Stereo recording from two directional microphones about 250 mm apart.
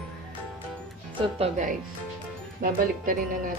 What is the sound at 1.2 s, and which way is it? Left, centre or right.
Speech, right.